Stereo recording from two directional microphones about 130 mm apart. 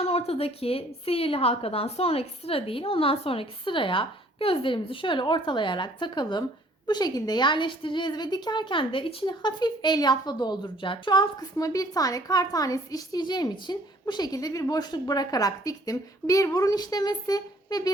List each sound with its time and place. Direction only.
0.0 s a woman's voice: 50° left (ahead or behind); by 17.9 s 30° left (ahead or behind)